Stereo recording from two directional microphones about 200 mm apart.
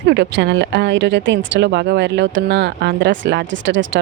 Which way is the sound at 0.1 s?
65° right (ahead or behind).